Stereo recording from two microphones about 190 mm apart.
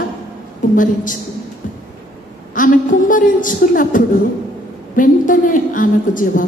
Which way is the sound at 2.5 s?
45° left (ahead or behind).